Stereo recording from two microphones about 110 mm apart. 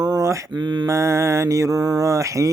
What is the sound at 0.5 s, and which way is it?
Mantra, 40° right (ahead or behind).